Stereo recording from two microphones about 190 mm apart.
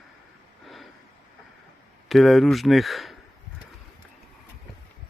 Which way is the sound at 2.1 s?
Centre (ahead or behind).